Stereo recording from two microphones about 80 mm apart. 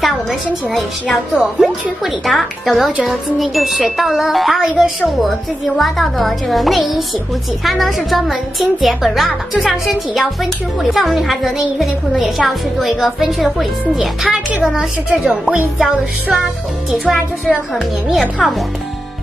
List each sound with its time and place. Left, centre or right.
0.0 s speech: centre
15.5 s music: centre
16.9 s speech: centre
17.5 s music: centre